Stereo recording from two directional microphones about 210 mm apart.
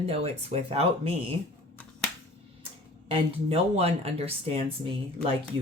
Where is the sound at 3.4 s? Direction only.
30° right (ahead or behind).